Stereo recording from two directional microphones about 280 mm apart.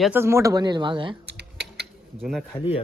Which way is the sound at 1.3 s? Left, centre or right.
Right.